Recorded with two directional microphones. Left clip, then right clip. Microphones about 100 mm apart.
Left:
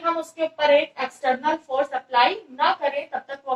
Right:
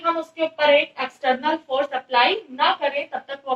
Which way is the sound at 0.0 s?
25° right (ahead or behind).